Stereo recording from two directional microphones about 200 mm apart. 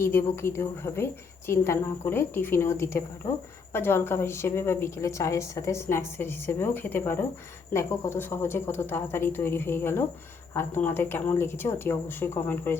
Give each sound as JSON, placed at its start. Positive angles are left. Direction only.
{"t": 0.0, "sound": "a woman's voice", "side_deg": 10}